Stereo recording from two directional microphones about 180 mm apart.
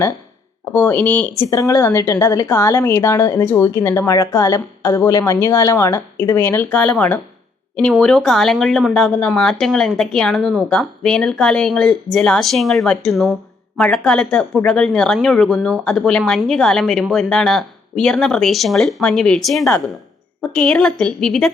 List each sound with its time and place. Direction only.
0.6 s a woman's voice: 10° left (ahead or behind)